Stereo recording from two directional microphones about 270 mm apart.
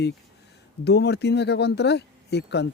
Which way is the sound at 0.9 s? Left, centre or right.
Left.